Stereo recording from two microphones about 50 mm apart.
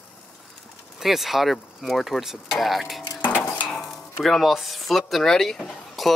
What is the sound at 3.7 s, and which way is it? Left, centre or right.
Stir, centre.